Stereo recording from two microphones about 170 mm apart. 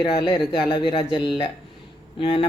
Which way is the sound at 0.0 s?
30° left (ahead or behind).